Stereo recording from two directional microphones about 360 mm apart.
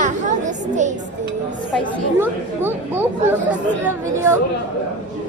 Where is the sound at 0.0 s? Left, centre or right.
Centre.